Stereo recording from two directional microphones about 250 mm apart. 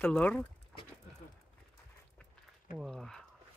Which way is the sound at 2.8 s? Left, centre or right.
Centre.